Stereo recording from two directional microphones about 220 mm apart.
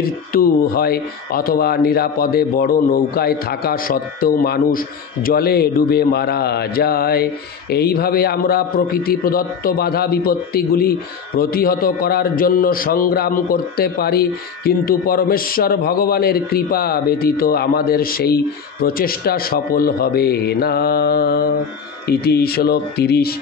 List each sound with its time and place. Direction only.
0.0 s a man's voice: 40° left (ahead or behind)